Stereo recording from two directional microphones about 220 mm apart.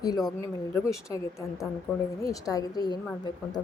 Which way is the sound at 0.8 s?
15° left (ahead or behind).